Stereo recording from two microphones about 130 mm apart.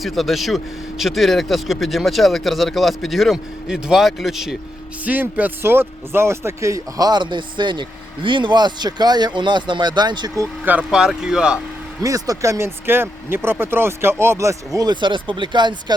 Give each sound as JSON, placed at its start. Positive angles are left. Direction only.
{"t": 0.0, "sound": "speech", "side_deg": 0}
{"t": 5.0, "sound": "speech", "side_deg": -15}
{"t": 10.7, "sound": "speech", "side_deg": -10}
{"t": 12.0, "sound": "speech", "side_deg": -25}